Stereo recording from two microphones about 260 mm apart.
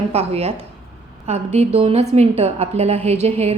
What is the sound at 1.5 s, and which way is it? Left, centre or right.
A woman's voice, right.